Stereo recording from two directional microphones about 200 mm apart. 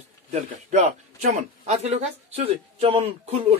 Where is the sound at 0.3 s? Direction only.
35° right (ahead or behind).